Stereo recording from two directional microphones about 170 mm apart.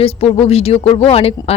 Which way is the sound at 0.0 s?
35° left (ahead or behind).